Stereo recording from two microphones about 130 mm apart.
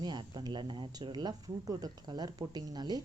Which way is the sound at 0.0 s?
35° right (ahead or behind).